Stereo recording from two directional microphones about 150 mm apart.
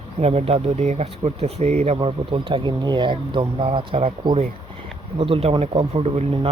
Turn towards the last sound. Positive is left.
turn(degrees=-45)  # may be behind; listen again after turning